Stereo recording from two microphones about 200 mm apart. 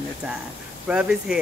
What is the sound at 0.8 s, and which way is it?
Speech, 5° right (ahead or behind).